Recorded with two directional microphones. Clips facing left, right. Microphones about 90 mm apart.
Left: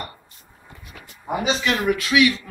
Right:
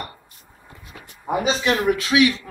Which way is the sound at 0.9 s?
20° right (ahead or behind).